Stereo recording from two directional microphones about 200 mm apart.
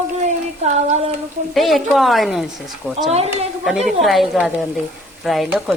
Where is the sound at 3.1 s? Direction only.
30° right (ahead or behind).